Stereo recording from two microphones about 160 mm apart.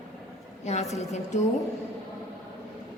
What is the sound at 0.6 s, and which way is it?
Speech, 45° left (ahead or behind).